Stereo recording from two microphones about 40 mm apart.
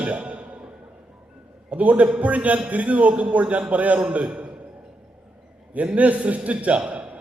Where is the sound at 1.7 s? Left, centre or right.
Right.